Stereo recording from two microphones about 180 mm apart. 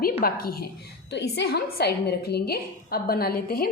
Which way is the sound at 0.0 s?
55° left (ahead or behind).